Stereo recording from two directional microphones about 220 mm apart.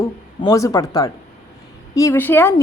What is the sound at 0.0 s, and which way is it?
Speech, 15° left (ahead or behind).